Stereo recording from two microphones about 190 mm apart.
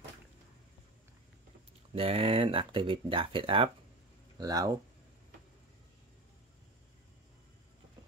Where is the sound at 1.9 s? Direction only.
30° right (ahead or behind).